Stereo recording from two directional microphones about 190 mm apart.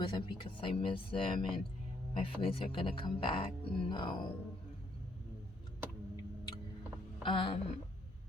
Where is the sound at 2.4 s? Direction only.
30° left (ahead or behind).